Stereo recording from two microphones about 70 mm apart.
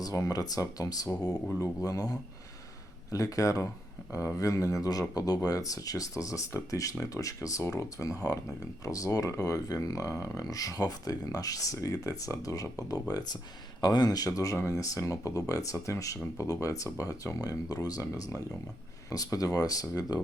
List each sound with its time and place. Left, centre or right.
0.0 s speech: left
14.3 s speech: left